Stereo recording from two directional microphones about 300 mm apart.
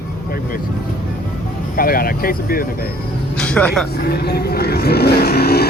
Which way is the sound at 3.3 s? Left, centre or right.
Centre.